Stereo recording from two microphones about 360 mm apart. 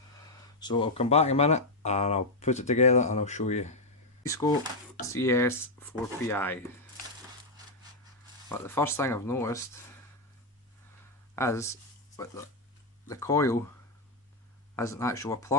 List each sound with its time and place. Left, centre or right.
0.6 s speech: centre
8.4 s speech: centre
11.3 s speech: centre
14.8 s speech: centre